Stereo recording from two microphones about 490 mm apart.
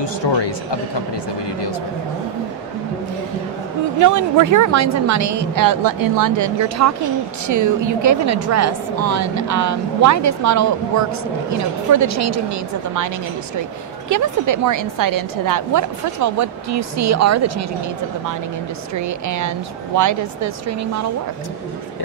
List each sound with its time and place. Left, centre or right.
0.0 s speech: left
4.0 s a woman's voice: right
18.9 s a woman's voice: right